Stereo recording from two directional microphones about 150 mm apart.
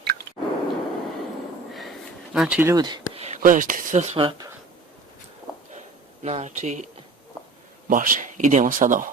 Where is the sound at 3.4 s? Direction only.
65° right (ahead or behind).